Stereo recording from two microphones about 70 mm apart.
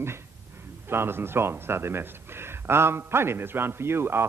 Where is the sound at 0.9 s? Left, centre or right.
Right.